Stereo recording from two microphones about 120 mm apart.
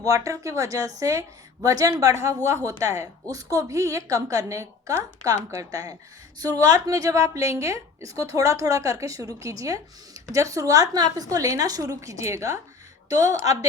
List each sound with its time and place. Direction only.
0.0 s a woman's voice: 25° right (ahead or behind)